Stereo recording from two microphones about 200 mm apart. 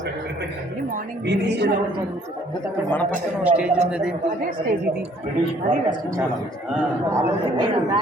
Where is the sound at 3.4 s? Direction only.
5° right (ahead or behind).